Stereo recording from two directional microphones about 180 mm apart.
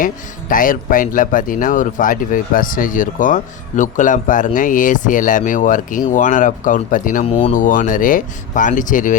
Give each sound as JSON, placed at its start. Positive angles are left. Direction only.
{"t": 0.0, "sound": "speech", "side_deg": 50}